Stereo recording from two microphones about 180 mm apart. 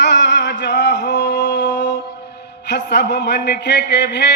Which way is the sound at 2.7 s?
70° left (ahead or behind).